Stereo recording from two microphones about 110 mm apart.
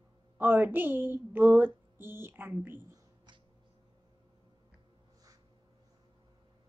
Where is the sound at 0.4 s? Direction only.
15° right (ahead or behind).